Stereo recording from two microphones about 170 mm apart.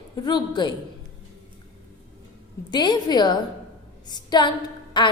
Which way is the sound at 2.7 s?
25° left (ahead or behind).